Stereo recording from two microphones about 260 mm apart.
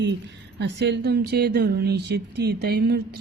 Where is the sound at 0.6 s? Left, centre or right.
Right.